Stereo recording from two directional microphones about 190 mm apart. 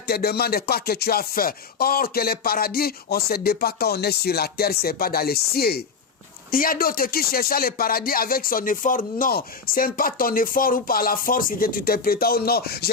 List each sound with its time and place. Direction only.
0.1 s speech: 55° left (ahead or behind)